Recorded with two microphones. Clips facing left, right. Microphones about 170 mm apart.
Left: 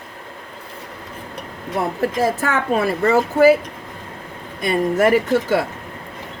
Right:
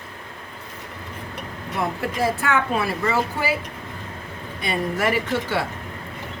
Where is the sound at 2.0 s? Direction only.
40° left (ahead or behind).